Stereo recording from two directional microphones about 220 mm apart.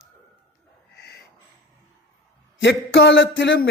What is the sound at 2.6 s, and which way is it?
Speech, 55° left (ahead or behind).